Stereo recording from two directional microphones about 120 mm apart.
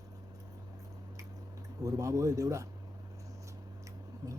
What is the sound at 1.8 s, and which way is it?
Speech, 25° right (ahead or behind).